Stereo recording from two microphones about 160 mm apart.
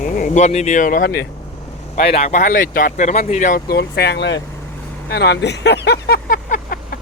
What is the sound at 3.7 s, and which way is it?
Speech, 90° left.